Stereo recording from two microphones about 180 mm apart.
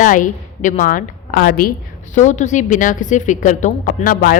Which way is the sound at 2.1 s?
40° left (ahead or behind).